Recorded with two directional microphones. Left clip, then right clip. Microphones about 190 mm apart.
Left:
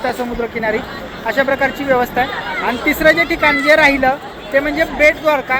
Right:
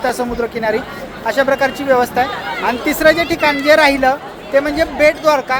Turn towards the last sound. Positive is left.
turn(degrees=-10)  # may be behind; listen again after turning